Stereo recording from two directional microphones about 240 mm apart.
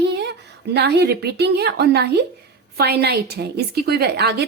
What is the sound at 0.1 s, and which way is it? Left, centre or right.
A woman's voice, right.